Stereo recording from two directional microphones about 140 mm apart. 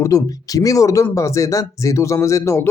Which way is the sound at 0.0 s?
25° left (ahead or behind).